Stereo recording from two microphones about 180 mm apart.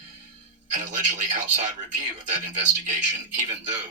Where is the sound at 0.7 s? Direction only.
45° right (ahead or behind).